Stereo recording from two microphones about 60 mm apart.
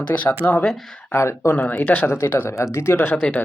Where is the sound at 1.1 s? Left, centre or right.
Left.